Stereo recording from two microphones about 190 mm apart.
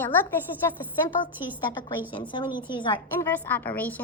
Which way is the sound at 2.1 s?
25° left (ahead or behind).